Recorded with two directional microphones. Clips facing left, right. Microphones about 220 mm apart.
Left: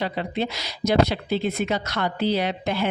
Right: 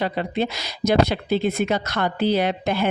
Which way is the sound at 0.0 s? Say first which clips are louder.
Right 3 dB; 50° right (ahead or behind).